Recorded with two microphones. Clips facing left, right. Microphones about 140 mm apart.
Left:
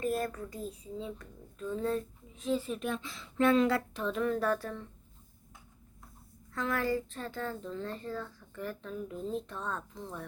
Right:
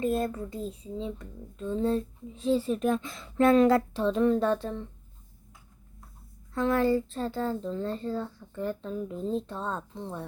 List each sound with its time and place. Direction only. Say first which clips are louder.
0.0 s a child's voice: right 5 dB; 25° right (ahead or behind)
6.5 s a child's voice: right 7 dB; 25° right (ahead or behind)